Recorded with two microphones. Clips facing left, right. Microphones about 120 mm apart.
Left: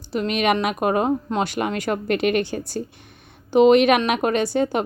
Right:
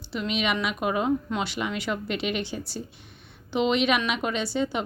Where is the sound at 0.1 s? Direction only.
50° left (ahead or behind).